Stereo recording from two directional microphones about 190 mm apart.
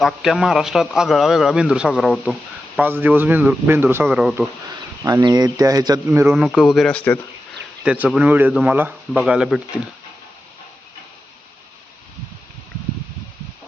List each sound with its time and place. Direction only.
0.0 s speech: centre (ahead or behind)
5.0 s speech: 20° right (ahead or behind)
6.3 s speech: 5° right (ahead or behind)
7.9 s speech: 5° right (ahead or behind)